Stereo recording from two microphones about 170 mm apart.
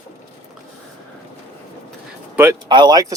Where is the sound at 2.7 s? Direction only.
25° right (ahead or behind).